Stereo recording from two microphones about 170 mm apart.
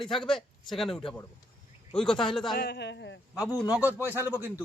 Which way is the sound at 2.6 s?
85° left.